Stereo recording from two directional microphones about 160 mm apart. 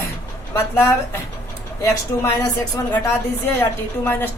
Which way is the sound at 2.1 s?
20° left (ahead or behind).